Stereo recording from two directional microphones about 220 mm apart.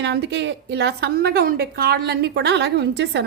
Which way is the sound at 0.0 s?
50° right (ahead or behind).